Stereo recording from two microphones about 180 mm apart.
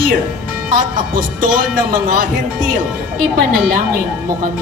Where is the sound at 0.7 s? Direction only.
50° right (ahead or behind).